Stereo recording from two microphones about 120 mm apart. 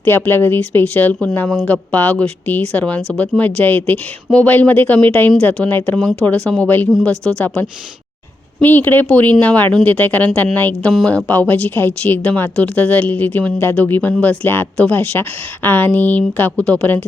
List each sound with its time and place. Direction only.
0.0 s a woman's voice: 15° left (ahead or behind)